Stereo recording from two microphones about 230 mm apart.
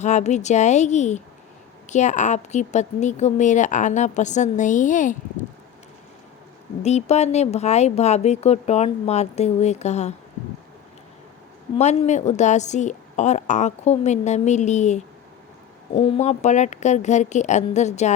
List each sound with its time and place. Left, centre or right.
0.0 s a woman's voice: left
6.8 s speech: left
11.8 s a woman's voice: left